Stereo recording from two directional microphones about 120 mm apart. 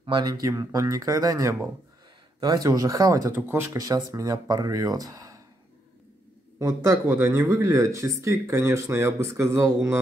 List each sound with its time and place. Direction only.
0.0 s speech: 35° right (ahead or behind)
6.6 s speech: 25° right (ahead or behind)